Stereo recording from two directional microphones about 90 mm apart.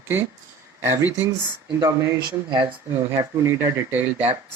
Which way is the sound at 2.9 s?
30° right (ahead or behind).